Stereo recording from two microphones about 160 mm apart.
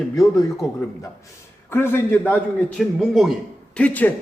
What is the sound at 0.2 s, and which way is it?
Speech, 20° left (ahead or behind).